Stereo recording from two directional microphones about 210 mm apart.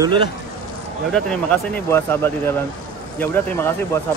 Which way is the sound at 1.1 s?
5° left (ahead or behind).